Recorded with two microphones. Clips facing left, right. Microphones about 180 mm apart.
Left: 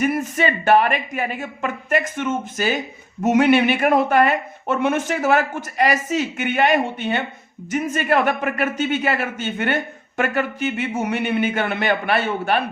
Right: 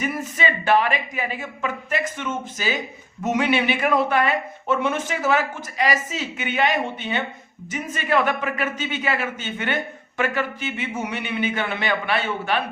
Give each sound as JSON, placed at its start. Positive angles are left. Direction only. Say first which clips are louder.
{"t": 0.0, "sound": "a man's voice", "louder": "left 5 dB", "side_deg": 50}